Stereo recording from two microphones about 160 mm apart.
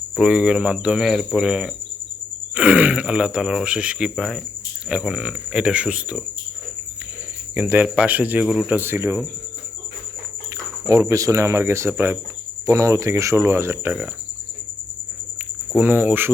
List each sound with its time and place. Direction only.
0.2 s speech: 5° right (ahead or behind)
7.5 s speech: 10° right (ahead or behind)
10.5 s speech: 20° right (ahead or behind)
15.7 s speech: 10° right (ahead or behind)